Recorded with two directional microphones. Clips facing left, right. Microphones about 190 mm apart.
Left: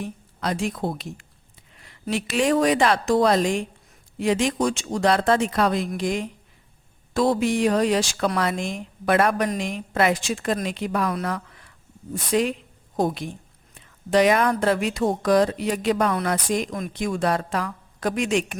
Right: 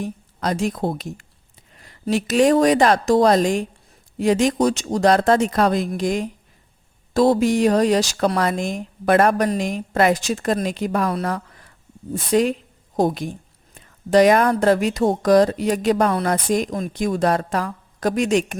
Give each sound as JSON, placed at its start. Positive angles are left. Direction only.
{"t": 0.0, "sound": "a woman's voice", "side_deg": -40}